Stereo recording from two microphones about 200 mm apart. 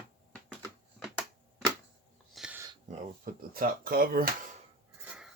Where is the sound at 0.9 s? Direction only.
Centre (ahead or behind).